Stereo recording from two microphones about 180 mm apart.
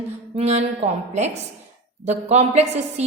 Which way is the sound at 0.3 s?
35° right (ahead or behind).